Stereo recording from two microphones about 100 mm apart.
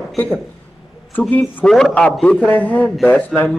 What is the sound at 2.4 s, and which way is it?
Speech, 15° left (ahead or behind).